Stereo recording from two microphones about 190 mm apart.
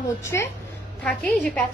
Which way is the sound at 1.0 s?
5° left (ahead or behind).